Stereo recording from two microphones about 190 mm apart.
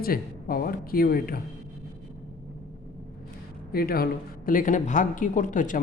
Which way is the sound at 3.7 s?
50° left (ahead or behind).